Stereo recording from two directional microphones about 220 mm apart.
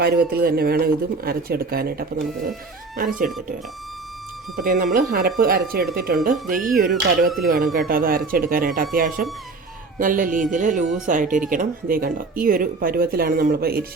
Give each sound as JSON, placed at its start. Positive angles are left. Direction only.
{"t": 0.0, "sound": "speech", "side_deg": -45}
{"t": 4.5, "sound": "speech", "side_deg": -40}